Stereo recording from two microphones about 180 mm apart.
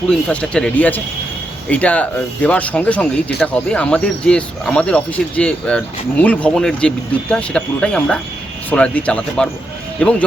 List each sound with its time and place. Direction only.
0.1 s speech: 5° left (ahead or behind)